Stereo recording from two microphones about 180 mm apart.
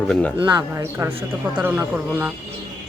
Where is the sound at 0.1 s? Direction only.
5° left (ahead or behind).